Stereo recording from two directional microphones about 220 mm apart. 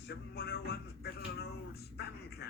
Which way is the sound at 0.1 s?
45° left (ahead or behind).